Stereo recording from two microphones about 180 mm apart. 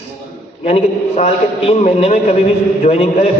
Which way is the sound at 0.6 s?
35° left (ahead or behind).